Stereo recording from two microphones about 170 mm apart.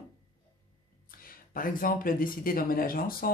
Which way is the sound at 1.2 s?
55° left (ahead or behind).